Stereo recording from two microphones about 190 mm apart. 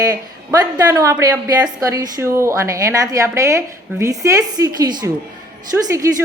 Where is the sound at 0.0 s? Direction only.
20° right (ahead or behind).